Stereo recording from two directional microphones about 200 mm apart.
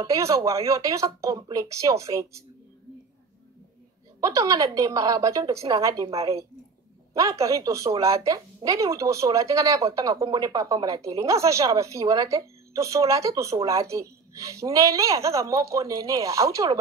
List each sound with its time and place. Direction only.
0.0 s a woman's voice: 15° right (ahead or behind)
4.2 s a woman's voice: 15° right (ahead or behind)